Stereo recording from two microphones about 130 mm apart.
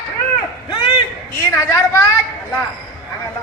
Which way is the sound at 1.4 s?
15° left (ahead or behind).